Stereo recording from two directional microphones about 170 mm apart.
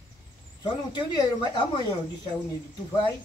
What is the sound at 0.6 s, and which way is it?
Speech, 25° left (ahead or behind).